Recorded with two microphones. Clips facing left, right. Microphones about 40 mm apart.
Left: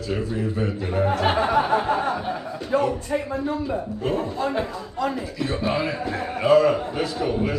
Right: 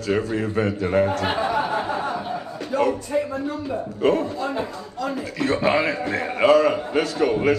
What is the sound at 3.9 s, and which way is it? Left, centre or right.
Speech, right.